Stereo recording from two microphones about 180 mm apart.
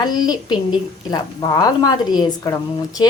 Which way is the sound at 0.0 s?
25° left (ahead or behind).